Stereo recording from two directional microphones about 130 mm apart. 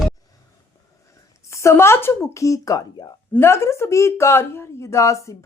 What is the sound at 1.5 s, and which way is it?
Speech, 20° left (ahead or behind).